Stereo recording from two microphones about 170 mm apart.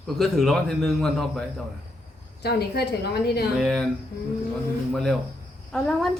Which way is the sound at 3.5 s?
Centre (ahead or behind).